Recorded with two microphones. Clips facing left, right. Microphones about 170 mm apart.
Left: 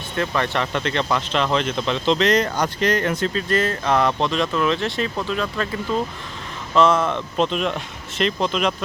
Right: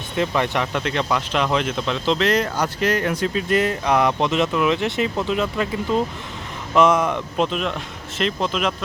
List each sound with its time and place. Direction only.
0.2 s speech: 15° right (ahead or behind)